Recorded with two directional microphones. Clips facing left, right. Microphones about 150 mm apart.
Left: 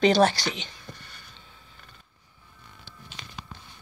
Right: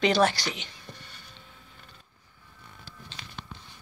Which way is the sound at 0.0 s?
30° left (ahead or behind).